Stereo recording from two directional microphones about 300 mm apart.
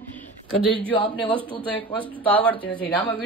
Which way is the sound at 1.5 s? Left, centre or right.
Centre.